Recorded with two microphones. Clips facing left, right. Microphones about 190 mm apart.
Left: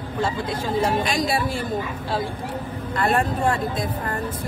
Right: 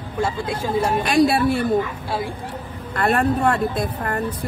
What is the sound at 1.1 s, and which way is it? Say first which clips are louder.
Speech: right 7 dB; 60° right (ahead or behind).